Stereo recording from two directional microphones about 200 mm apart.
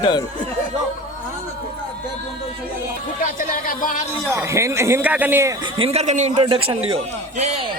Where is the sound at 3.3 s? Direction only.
40° left (ahead or behind).